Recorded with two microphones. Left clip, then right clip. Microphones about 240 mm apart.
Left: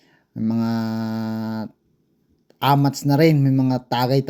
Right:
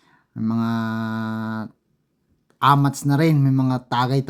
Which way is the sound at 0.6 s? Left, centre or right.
Right.